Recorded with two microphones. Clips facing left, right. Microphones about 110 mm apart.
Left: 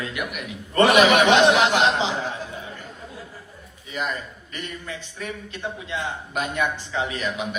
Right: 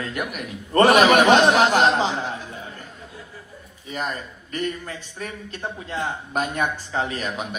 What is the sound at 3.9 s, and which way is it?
A man's voice, 40° right (ahead or behind).